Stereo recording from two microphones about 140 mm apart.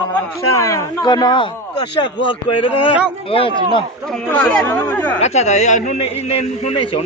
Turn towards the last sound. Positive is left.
turn(degrees=45)  # may be behind; listen again after turning